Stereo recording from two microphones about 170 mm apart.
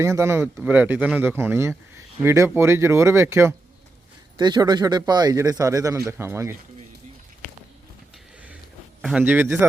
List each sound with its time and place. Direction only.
0.0 s speech: 15° right (ahead or behind)
4.4 s speech: 25° right (ahead or behind)
9.0 s speech: 5° right (ahead or behind)